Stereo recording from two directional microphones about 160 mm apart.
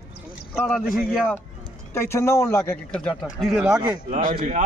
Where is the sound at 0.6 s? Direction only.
Centre (ahead or behind).